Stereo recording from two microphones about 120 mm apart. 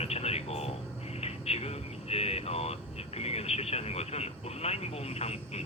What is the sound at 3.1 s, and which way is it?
Speech, 60° left (ahead or behind).